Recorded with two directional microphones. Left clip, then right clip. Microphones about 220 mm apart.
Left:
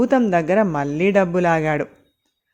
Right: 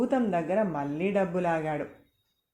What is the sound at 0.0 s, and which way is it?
Speech, 45° left (ahead or behind).